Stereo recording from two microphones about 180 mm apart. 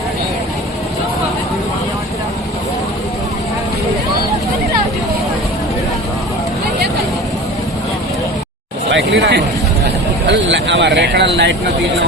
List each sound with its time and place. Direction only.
8.9 s speech: 75° right (ahead or behind)
10.2 s speech: 80° right